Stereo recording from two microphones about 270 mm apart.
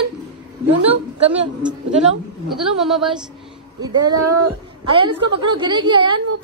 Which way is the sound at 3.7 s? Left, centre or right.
Centre.